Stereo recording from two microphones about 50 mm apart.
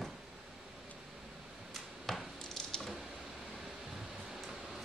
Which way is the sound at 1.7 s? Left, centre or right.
Centre.